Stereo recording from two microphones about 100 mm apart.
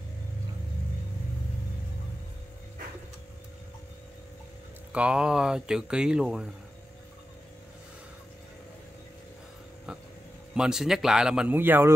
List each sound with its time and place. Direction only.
4.9 s speech: 10° right (ahead or behind)
10.5 s speech: 5° right (ahead or behind)
11.5 s speech: 20° right (ahead or behind)